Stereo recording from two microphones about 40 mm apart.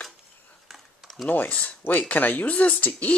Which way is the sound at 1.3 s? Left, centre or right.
Left.